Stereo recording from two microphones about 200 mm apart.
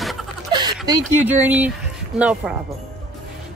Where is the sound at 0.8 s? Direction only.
15° right (ahead or behind).